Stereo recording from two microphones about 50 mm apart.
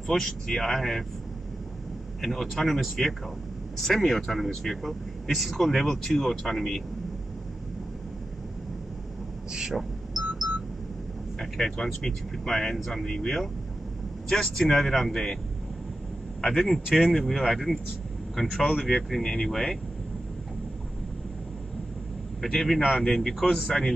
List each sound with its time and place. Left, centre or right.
0.1 s speech: centre
2.2 s speech: centre
9.5 s a sound: centre
10.4 s a sound: right
11.3 s speech: centre
16.3 s speech: centre
22.5 s speech: centre